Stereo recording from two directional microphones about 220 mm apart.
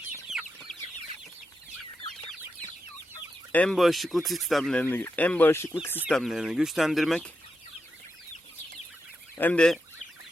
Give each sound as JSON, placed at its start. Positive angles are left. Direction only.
{"t": 0.3, "sound": "chicken", "side_deg": 0}
{"t": 3.5, "sound": "speech", "side_deg": 5}
{"t": 9.4, "sound": "speech", "side_deg": 5}